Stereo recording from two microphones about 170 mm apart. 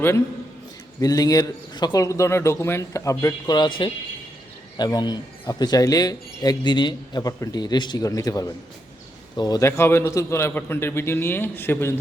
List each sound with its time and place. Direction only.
0.9 s a man's voice: 20° left (ahead or behind)
4.8 s a man's voice: 25° left (ahead or behind)